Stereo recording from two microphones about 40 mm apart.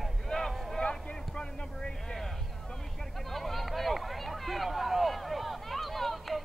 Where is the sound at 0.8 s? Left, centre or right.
Left.